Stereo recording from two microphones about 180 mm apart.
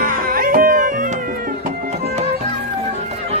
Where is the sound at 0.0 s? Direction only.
50° right (ahead or behind).